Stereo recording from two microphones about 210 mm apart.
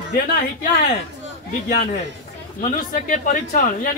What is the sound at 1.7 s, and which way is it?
A man's voice, 40° left (ahead or behind).